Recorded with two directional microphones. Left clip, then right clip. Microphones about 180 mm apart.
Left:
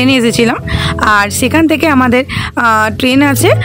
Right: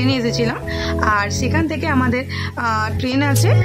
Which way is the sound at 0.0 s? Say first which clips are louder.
Left 9 dB; 45° left (ahead or behind).